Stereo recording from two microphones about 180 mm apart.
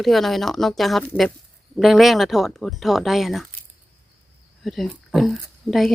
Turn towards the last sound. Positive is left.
turn(degrees=0)  # may be behind; listen again after turning